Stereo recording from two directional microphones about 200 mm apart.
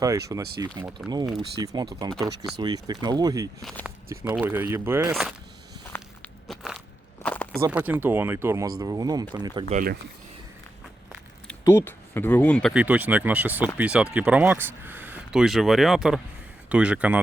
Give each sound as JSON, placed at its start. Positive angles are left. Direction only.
{"t": 0.0, "sound": "speech", "side_deg": -15}
{"t": 3.6, "sound": "speech", "side_deg": 0}
{"t": 6.5, "sound": "crushing", "side_deg": 0}
{"t": 7.2, "sound": "a sound", "side_deg": 10}
{"t": 7.6, "sound": "speech", "side_deg": -5}
{"t": 9.7, "sound": "speech", "side_deg": -45}
{"t": 11.4, "sound": "speech", "side_deg": 15}
{"t": 12.7, "sound": "speech", "side_deg": -5}